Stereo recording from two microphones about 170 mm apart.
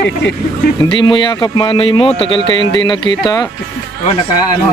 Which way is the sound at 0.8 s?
30° left (ahead or behind).